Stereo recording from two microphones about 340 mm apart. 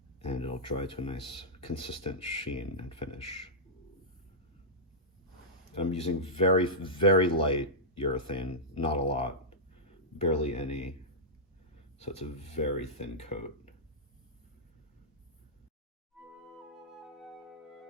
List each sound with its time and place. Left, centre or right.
0.2 s speech: centre
5.7 s speech: centre
11.9 s speech: centre
17.0 s flute: centre